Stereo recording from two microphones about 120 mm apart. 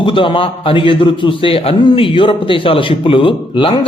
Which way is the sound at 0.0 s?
45° left (ahead or behind).